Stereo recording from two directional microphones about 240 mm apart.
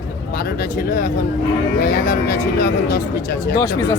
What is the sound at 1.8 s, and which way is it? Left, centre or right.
Speech, left.